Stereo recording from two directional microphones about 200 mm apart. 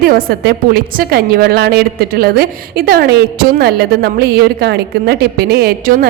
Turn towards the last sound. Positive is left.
turn(degrees=-45)  # may be behind; listen again after turning